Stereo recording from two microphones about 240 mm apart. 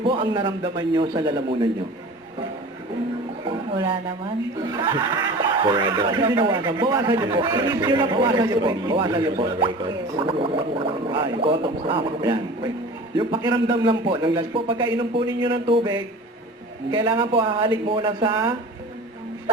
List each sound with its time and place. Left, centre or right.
0.0 s speech: right
3.4 s speech: centre